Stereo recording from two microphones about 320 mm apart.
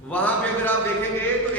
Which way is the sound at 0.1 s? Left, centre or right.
Centre.